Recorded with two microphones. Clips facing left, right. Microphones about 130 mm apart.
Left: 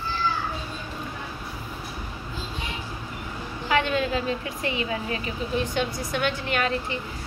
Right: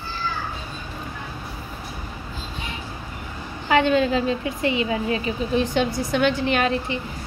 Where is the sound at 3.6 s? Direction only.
25° right (ahead or behind).